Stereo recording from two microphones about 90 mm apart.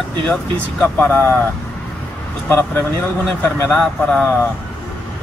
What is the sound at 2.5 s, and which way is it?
Speech, 20° left (ahead or behind).